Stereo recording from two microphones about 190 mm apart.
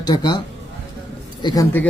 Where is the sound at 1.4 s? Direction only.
25° left (ahead or behind).